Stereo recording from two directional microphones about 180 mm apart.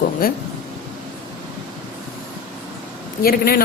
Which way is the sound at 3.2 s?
55° left (ahead or behind).